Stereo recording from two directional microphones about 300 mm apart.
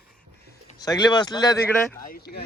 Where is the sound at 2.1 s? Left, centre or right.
Left.